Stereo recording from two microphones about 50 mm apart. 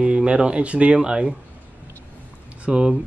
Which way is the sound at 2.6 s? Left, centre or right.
Centre.